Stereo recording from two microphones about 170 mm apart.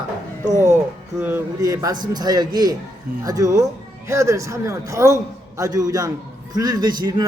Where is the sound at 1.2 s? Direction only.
15° right (ahead or behind).